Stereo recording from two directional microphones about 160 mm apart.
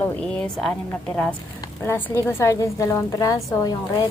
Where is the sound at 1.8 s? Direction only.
10° left (ahead or behind).